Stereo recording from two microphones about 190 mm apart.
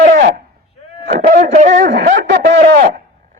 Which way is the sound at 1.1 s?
40° right (ahead or behind).